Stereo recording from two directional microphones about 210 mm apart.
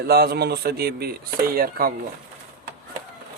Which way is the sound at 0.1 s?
50° right (ahead or behind).